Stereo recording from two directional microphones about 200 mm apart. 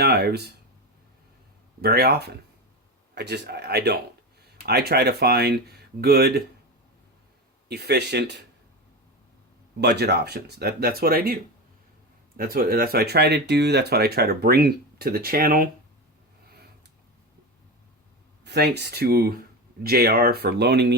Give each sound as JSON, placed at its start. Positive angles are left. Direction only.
{"t": 0.0, "sound": "speech", "side_deg": -50}
{"t": 1.8, "sound": "speech", "side_deg": -50}
{"t": 7.7, "sound": "speech", "side_deg": -55}
{"t": 9.8, "sound": "speech", "side_deg": -55}
{"t": 12.4, "sound": "speech", "side_deg": -45}
{"t": 18.4, "sound": "speech", "side_deg": -55}